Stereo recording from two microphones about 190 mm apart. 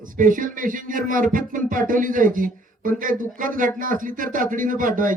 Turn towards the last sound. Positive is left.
turn(degrees=-45)  # may be behind; listen again after turning